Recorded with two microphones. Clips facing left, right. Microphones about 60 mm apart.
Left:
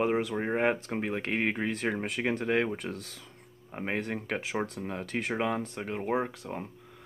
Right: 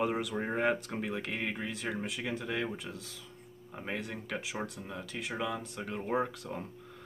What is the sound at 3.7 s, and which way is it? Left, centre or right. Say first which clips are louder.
Speech: left 6 dB; left.